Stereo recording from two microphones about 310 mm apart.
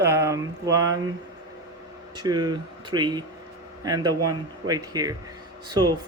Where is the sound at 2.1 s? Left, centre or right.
Centre.